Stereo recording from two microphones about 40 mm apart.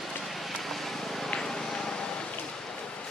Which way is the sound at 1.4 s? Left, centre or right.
Centre.